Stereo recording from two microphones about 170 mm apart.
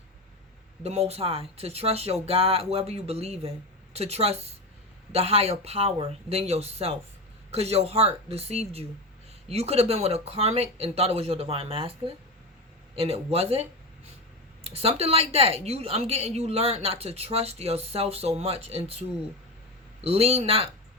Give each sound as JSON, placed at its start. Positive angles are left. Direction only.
{"t": 0.8, "sound": "a woman's voice", "side_deg": -40}